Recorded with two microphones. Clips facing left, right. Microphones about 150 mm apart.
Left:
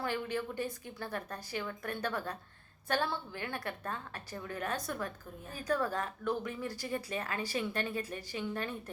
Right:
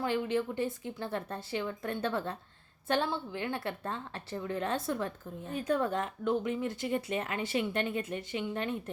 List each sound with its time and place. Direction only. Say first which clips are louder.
0.0 s a woman's voice: right 5 dB; 20° right (ahead or behind)